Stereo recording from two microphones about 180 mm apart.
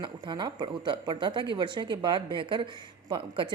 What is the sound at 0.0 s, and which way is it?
A woman's voice, 25° right (ahead or behind).